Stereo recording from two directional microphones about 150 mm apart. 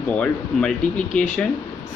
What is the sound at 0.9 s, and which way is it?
Speech, 55° left (ahead or behind).